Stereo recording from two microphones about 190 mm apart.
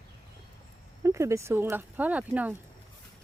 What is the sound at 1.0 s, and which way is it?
Speech, 15° right (ahead or behind).